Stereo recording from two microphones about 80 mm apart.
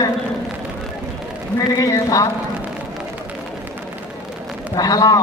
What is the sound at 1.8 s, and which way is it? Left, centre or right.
Speech, left.